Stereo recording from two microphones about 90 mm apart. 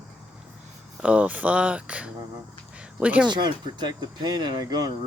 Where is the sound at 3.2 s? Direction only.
55° right (ahead or behind).